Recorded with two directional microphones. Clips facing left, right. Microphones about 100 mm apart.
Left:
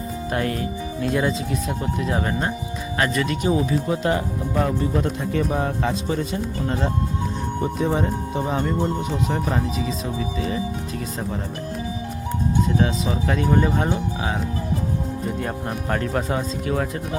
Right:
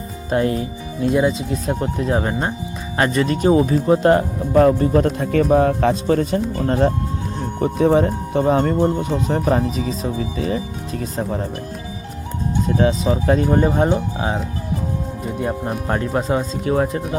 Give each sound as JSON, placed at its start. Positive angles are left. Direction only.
{"t": 0.3, "sound": "speech", "side_deg": -25}
{"t": 1.6, "sound": "speech", "side_deg": -35}
{"t": 9.2, "sound": "speech", "side_deg": -40}
{"t": 12.6, "sound": "speech", "side_deg": -35}
{"t": 15.4, "sound": "speech", "side_deg": -15}